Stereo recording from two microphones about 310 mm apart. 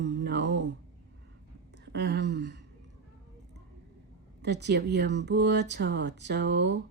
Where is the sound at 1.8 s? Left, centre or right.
Right.